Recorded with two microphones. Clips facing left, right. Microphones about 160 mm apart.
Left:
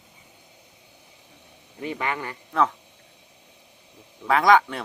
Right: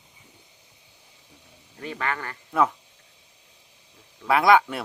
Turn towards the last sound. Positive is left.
turn(degrees=-5)  # may be behind; listen again after turning